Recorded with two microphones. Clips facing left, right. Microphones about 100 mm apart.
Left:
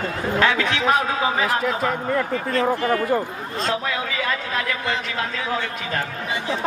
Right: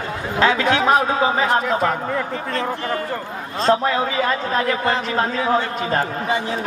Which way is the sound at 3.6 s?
35° right (ahead or behind).